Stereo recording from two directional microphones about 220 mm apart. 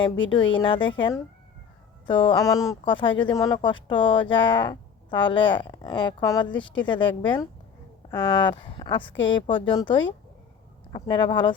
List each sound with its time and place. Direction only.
0.5 s speech: 20° left (ahead or behind)